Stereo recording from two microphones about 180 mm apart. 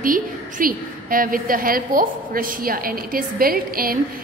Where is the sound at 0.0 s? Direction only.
50° right (ahead or behind).